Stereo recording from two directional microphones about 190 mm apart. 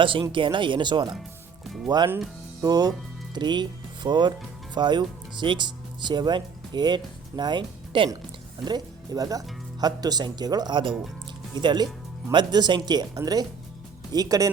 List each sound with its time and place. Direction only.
0.0 s speech: 25° right (ahead or behind)
1.6 s speech: centre (ahead or behind)
2.6 s speech: 20° right (ahead or behind)